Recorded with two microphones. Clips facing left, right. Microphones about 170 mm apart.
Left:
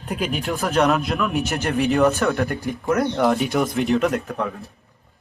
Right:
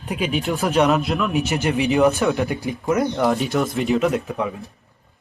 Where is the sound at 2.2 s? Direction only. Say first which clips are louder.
Right 1 dB; 5° right (ahead or behind).